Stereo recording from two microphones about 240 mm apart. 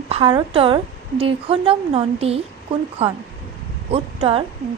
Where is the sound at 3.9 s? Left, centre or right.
Right.